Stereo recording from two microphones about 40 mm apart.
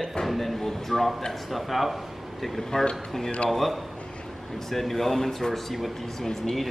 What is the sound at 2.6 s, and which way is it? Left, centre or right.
A man's voice, centre.